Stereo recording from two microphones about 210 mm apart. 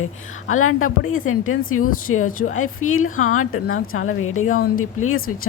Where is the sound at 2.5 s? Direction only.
80° left.